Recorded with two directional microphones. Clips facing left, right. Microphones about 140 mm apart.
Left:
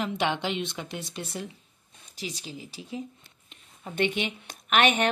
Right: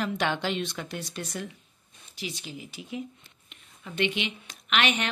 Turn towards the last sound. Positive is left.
turn(degrees=45)  # may be behind; listen again after turning